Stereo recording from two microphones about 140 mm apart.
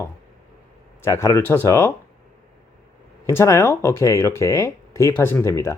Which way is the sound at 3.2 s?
20° left (ahead or behind).